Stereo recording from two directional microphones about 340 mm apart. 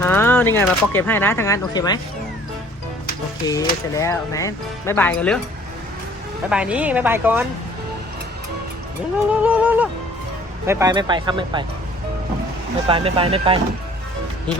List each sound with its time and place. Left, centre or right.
0.0 s speech: centre
3.4 s speech: centre
6.5 s speech: centre
9.3 s speech: centre
12.9 s speech: centre